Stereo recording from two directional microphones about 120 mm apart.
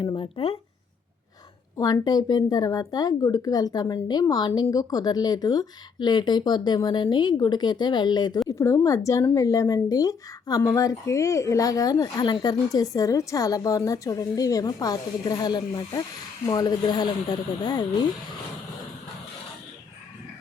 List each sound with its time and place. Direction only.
0.0 s speech: 40° left (ahead or behind)
1.8 s speech: 35° left (ahead or behind)
8.4 s a woman's voice: 25° left (ahead or behind)